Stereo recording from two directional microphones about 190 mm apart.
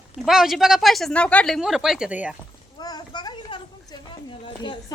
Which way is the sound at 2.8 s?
20° left (ahead or behind).